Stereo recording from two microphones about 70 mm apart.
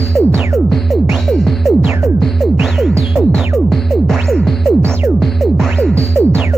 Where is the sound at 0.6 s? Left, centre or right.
Centre.